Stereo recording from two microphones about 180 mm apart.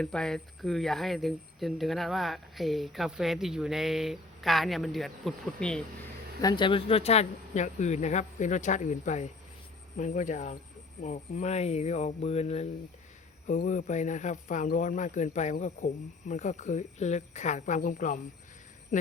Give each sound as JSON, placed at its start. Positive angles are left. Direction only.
{"t": 0.0, "sound": "speech", "side_deg": 5}
{"t": 6.4, "sound": "speech", "side_deg": 25}